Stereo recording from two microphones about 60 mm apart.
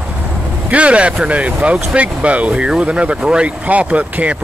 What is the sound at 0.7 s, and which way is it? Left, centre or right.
Speech, right.